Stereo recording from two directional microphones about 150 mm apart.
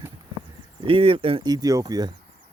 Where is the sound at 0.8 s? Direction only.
40° right (ahead or behind).